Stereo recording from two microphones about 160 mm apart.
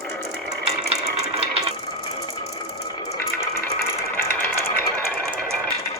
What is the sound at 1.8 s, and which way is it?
Music, 25° left (ahead or behind).